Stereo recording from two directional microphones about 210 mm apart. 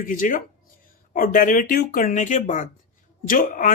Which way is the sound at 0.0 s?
40° left (ahead or behind).